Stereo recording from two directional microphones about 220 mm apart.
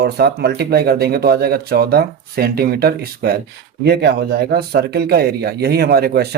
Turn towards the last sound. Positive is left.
turn(degrees=-45)  # may be behind; listen again after turning